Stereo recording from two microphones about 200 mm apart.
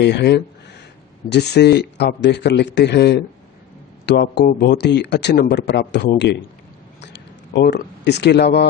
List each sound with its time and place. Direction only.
0.0 s speech: 55° left (ahead or behind)